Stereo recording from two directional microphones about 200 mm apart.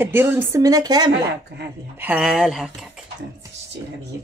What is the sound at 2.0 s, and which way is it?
Speech, 5° right (ahead or behind).